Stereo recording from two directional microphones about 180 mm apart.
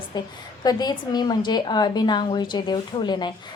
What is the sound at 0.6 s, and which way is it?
A woman's voice, 20° left (ahead or behind).